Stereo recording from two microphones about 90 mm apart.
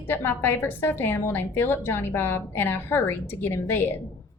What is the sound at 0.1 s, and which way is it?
A woman's voice, 25° left (ahead or behind).